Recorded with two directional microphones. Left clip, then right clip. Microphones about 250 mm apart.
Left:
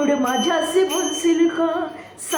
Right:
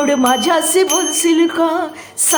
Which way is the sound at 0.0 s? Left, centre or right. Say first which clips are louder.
Right 6 dB; right.